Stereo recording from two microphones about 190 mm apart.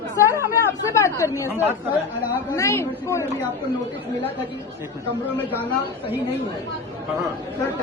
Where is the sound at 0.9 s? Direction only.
15° left (ahead or behind).